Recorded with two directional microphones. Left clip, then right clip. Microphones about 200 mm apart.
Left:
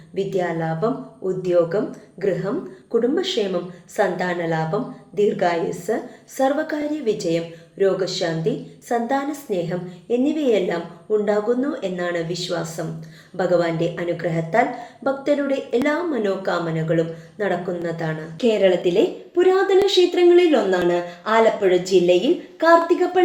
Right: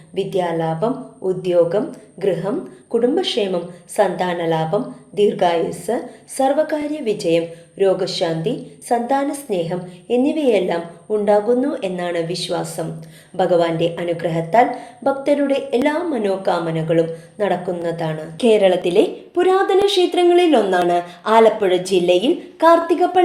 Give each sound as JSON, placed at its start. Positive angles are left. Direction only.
{"t": 0.2, "sound": "a woman's voice", "side_deg": -30}